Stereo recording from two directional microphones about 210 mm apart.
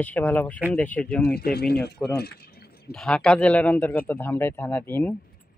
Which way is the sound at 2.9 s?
5° left (ahead or behind).